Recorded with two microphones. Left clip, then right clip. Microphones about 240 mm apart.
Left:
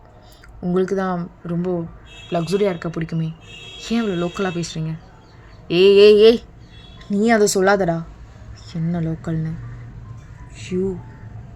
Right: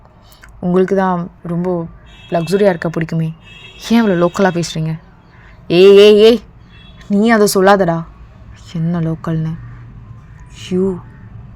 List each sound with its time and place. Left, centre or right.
0.6 s speech: right